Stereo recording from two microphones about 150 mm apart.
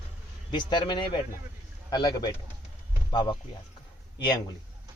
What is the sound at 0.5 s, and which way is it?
A man's voice, 30° left (ahead or behind).